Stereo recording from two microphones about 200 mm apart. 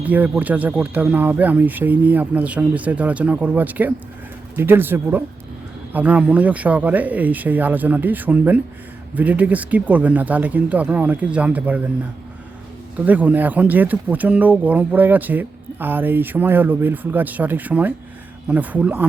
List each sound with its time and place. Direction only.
0.0 s speech: 10° right (ahead or behind)
13.1 s speech: 10° right (ahead or behind)